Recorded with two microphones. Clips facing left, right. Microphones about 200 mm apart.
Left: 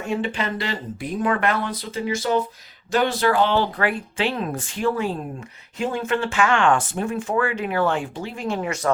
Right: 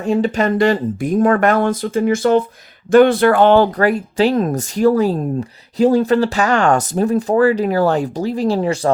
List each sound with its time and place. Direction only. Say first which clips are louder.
0.0 s speech: right 9 dB; 40° right (ahead or behind)